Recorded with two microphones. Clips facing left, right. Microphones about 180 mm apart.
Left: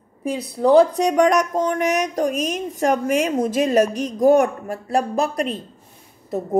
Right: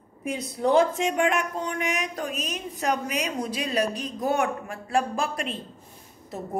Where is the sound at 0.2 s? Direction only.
35° left (ahead or behind).